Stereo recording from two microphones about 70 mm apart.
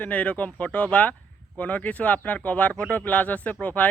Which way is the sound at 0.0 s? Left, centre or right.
Centre.